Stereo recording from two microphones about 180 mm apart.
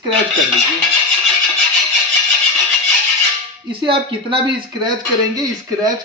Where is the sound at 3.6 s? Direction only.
25° right (ahead or behind).